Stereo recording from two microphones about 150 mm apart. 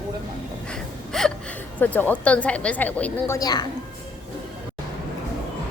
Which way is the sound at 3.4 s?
25° left (ahead or behind).